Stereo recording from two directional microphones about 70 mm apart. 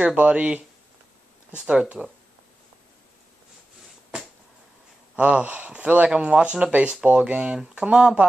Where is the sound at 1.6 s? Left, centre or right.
Centre.